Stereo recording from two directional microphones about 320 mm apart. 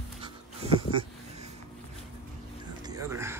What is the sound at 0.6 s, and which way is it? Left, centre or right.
Dog, centre.